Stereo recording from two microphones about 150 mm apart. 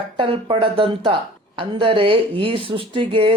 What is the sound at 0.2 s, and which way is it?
Speech, 35° right (ahead or behind).